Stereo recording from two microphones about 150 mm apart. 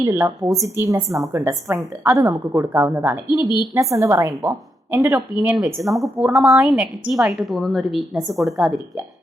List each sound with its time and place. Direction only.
0.0 s a woman's voice: 15° right (ahead or behind)